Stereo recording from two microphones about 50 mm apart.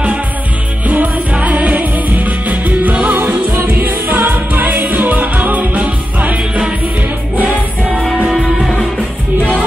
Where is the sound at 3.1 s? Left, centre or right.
Right.